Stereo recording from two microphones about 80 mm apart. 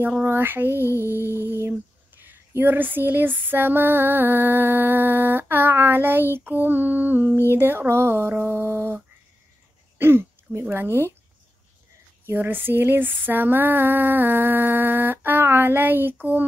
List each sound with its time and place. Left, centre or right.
0.2 s speech: right
0.7 s music: left
1.7 s speech: right
9.9 s throat clearing: right
10.7 s speech: right
12.4 s speech: right